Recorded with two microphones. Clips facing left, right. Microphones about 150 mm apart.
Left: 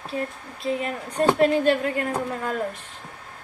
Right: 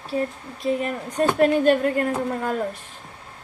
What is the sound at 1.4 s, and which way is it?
Speech, 45° right (ahead or behind).